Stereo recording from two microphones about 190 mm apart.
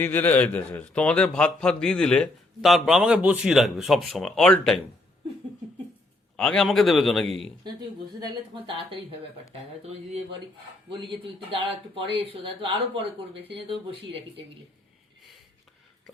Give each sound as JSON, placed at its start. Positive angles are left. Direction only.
{"t": 0.0, "sound": "a man's voice", "side_deg": 10}
{"t": 6.3, "sound": "a man's voice", "side_deg": 5}
{"t": 9.8, "sound": "speech", "side_deg": -35}